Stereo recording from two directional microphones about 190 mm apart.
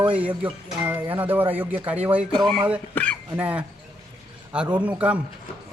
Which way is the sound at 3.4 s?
10° right (ahead or behind).